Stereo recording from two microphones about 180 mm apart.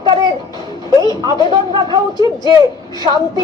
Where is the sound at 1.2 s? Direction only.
20° right (ahead or behind).